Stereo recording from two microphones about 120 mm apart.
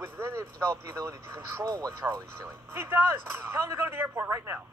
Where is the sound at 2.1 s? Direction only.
20° right (ahead or behind).